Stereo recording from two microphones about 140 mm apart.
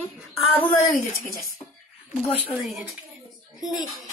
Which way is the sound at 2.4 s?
Centre (ahead or behind).